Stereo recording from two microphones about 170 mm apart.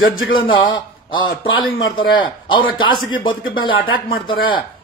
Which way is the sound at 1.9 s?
30° left (ahead or behind).